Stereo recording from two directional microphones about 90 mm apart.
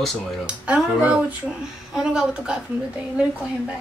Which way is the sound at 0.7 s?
15° right (ahead or behind).